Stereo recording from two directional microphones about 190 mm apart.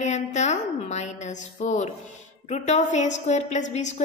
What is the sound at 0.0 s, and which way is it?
A woman's voice, 35° left (ahead or behind).